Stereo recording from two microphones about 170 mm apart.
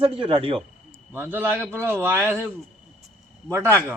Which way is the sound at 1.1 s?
10° right (ahead or behind).